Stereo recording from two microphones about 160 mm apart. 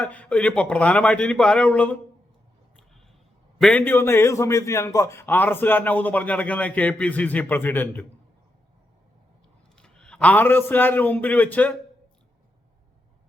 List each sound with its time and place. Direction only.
0.0 s a man's voice: 10° left (ahead or behind)
3.6 s a man's voice: 10° left (ahead or behind)
9.7 s a man's voice: 5° left (ahead or behind)